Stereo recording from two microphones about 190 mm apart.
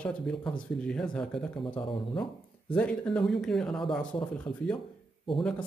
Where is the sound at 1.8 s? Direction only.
25° left (ahead or behind).